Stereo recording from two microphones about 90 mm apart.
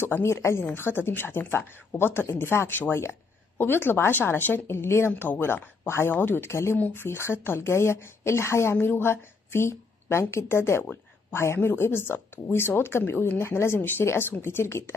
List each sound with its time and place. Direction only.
0.0 s a woman's voice: 25° left (ahead or behind)